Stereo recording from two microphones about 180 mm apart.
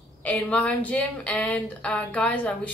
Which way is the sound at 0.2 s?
5° left (ahead or behind).